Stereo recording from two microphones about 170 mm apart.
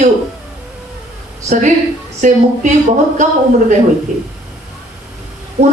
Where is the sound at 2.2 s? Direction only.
45° right (ahead or behind).